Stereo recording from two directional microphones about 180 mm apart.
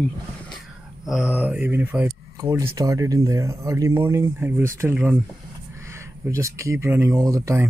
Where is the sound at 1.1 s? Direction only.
5° right (ahead or behind).